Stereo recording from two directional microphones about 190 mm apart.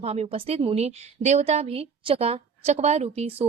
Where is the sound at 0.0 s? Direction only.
35° right (ahead or behind).